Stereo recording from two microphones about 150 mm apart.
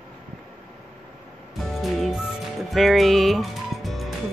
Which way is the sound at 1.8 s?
Centre (ahead or behind).